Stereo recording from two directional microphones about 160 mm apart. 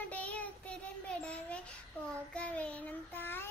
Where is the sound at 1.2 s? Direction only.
5° left (ahead or behind).